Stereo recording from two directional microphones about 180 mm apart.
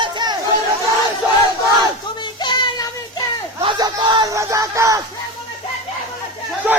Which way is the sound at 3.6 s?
25° right (ahead or behind).